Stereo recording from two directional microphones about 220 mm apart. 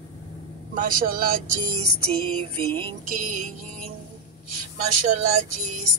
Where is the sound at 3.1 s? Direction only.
35° right (ahead or behind).